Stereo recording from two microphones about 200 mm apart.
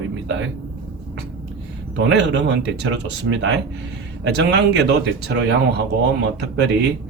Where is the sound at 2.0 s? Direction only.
65° right (ahead or behind).